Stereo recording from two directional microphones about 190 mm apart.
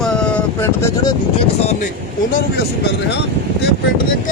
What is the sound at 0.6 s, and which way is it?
Speech, 15° left (ahead or behind).